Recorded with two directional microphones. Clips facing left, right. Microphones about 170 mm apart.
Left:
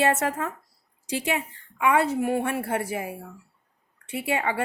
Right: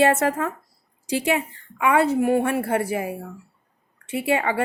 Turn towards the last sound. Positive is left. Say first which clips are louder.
# right 4 dB
turn(degrees=-90)